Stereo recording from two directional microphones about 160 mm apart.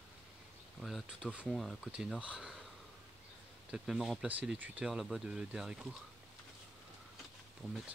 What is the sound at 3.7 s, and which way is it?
Speech, centre (ahead or behind).